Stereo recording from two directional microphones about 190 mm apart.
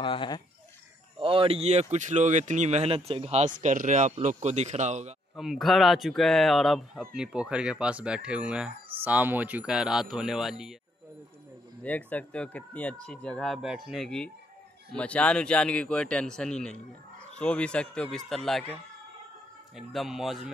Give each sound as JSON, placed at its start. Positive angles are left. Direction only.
{"t": 0.0, "sound": "speech", "side_deg": 25}
{"t": 1.2, "sound": "speech", "side_deg": -30}
{"t": 5.3, "sound": "speech", "side_deg": 0}
{"t": 11.8, "sound": "speech", "side_deg": 10}
{"t": 19.9, "sound": "speech", "side_deg": 0}